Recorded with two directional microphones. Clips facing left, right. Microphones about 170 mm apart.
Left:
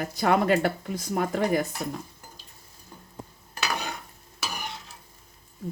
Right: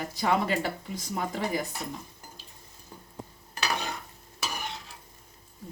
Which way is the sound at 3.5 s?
Centre (ahead or behind).